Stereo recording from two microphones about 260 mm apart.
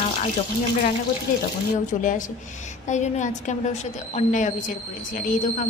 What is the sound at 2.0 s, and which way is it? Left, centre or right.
Speech, left.